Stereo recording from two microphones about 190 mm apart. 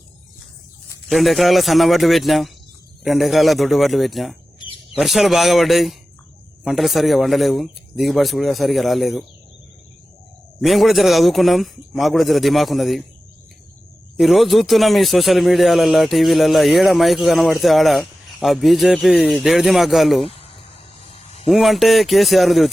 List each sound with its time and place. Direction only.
1.0 s speech: centre (ahead or behind)
10.6 s speech: centre (ahead or behind)
14.2 s speech: centre (ahead or behind)
20.2 s a sound: 30° left (ahead or behind)
21.4 s speech: centre (ahead or behind)